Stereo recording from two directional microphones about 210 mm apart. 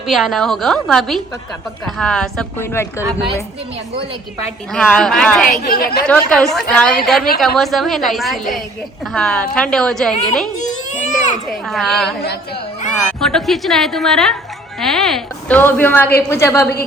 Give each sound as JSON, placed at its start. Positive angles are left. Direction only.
{"t": 0.1, "sound": "a woman's voice", "side_deg": 0}
{"t": 4.7, "sound": "a woman's voice", "side_deg": 5}
{"t": 5.5, "sound": "a woman's voice", "side_deg": 45}
{"t": 6.1, "sound": "a woman's voice", "side_deg": 0}
{"t": 10.6, "sound": "baby cry", "side_deg": 35}
{"t": 11.4, "sound": "a woman's voice", "side_deg": 0}